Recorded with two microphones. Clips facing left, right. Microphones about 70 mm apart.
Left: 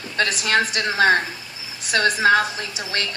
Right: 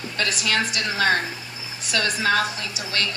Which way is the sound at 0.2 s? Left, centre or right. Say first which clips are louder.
Left 4 dB; left.